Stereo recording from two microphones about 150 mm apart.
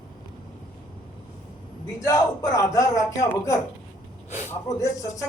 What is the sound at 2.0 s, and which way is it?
Speech, 20° left (ahead or behind).